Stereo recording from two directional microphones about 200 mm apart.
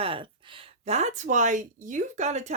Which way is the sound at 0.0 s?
25° right (ahead or behind).